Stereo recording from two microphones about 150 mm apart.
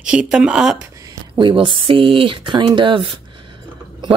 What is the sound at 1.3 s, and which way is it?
Speech, 35° right (ahead or behind).